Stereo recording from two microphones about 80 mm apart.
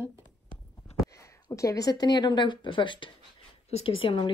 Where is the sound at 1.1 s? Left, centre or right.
Left.